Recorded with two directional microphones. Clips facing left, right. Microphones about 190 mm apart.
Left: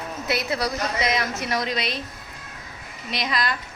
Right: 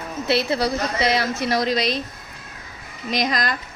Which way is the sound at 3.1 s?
40° right (ahead or behind).